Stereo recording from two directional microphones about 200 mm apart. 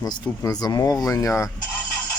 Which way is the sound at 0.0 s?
20° left (ahead or behind).